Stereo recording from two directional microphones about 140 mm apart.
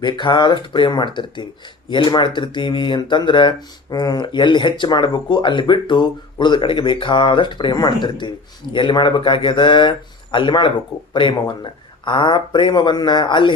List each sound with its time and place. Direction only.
0.0 s speech: 35° left (ahead or behind)